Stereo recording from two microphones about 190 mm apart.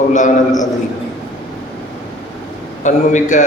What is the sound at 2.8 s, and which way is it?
Speech, 40° left (ahead or behind).